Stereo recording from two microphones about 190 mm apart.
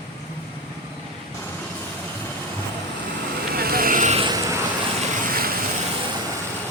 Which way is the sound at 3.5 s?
50° right (ahead or behind).